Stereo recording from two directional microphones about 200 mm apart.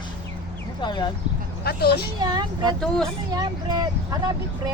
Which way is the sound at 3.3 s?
20° right (ahead or behind).